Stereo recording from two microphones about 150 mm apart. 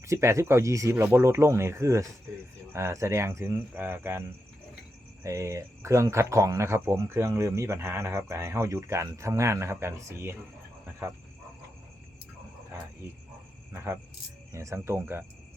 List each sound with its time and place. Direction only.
0.0 s speech: 20° right (ahead or behind)
5.2 s speech: 20° right (ahead or behind)
13.7 s speech: 20° right (ahead or behind)